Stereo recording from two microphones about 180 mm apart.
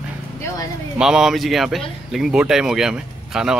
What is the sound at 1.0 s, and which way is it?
Speech, 5° right (ahead or behind).